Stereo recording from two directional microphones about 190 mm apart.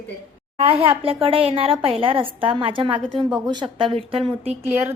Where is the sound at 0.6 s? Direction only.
30° right (ahead or behind).